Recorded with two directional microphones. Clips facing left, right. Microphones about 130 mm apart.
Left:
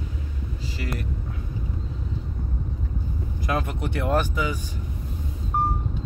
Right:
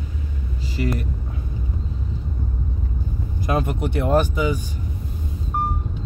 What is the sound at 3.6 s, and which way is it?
Speech, 15° right (ahead or behind).